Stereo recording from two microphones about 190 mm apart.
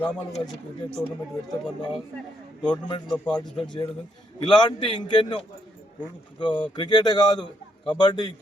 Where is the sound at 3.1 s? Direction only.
5° left (ahead or behind).